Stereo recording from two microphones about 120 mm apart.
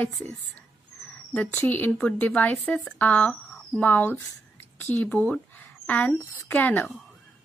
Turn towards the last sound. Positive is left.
turn(degrees=15)  # may be behind; listen again after turning